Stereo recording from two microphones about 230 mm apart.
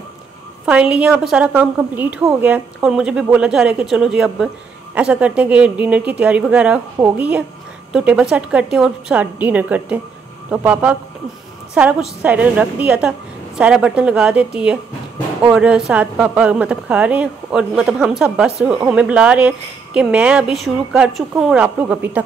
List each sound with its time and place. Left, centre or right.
0.7 s speech: centre